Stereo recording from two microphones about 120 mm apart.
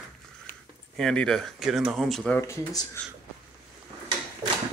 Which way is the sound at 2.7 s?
30° left (ahead or behind).